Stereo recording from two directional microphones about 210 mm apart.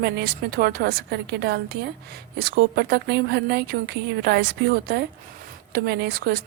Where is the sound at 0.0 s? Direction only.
50° right (ahead or behind).